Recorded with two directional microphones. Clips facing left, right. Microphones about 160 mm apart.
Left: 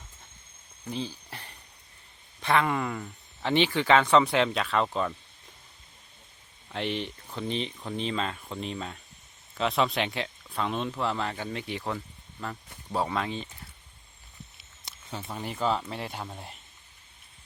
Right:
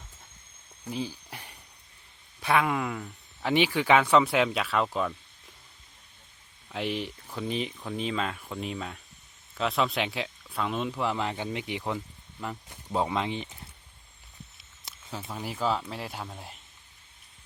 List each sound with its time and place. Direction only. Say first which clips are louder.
0.9 s speech: right 1 dB; 10° right (ahead or behind)
6.7 s speech: even; 5° right (ahead or behind)
14.6 s speech: even; centre (ahead or behind)